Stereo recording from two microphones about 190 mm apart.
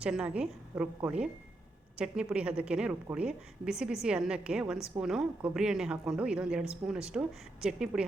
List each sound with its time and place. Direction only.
0.0 s speech: 5° right (ahead or behind)